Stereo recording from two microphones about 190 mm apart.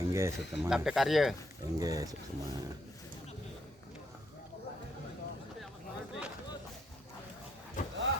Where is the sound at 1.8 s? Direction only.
20° right (ahead or behind).